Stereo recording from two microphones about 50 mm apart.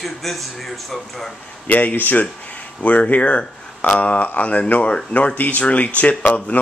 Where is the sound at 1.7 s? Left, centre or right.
Left.